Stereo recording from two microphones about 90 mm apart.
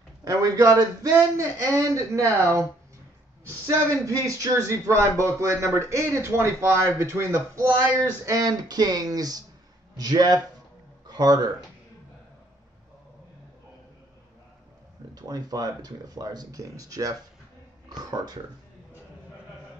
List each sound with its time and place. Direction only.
0.2 s a man's voice: 45° right (ahead or behind)
3.6 s speech: 35° right (ahead or behind)
15.1 s speech: 45° right (ahead or behind)